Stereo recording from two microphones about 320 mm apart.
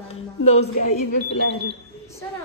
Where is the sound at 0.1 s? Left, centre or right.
Centre.